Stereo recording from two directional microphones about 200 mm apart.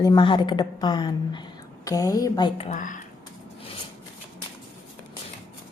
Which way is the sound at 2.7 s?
40° left (ahead or behind).